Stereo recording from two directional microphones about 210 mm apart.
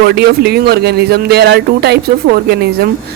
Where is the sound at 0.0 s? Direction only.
50° right (ahead or behind).